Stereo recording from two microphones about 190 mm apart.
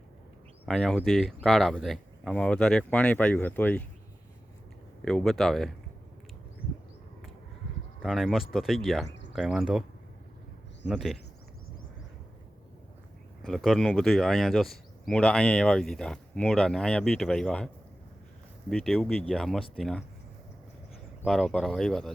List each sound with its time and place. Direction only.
0.6 s speech: centre (ahead or behind)
5.0 s speech: centre (ahead or behind)
8.0 s speech: centre (ahead or behind)
10.8 s speech: centre (ahead or behind)
13.4 s speech: centre (ahead or behind)
18.7 s speech: centre (ahead or behind)
21.2 s speech: centre (ahead or behind)